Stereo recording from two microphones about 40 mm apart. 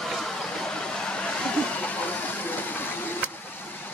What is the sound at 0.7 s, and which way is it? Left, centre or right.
Vehicle, centre.